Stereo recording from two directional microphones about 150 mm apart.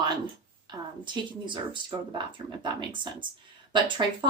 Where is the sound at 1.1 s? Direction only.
30° right (ahead or behind).